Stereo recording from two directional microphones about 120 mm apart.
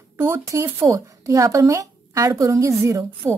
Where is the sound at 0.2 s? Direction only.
20° right (ahead or behind).